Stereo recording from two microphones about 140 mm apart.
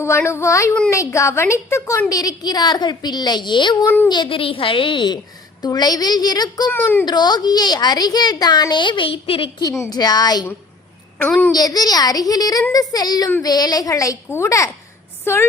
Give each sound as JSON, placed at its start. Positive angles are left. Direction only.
{"t": 0.0, "sound": "a woman's voice", "side_deg": 20}
{"t": 3.8, "sound": "speech", "side_deg": 15}
{"t": 4.1, "sound": "a woman's voice", "side_deg": 35}
{"t": 6.7, "sound": "speech", "side_deg": 15}
{"t": 7.0, "sound": "a woman's voice", "side_deg": 30}
{"t": 9.9, "sound": "a woman's voice", "side_deg": 30}
{"t": 11.2, "sound": "speech", "side_deg": 15}
{"t": 11.5, "sound": "a woman's voice", "side_deg": 25}